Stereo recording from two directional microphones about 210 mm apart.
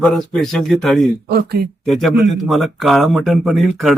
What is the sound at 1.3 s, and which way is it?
Speech, 50° right (ahead or behind).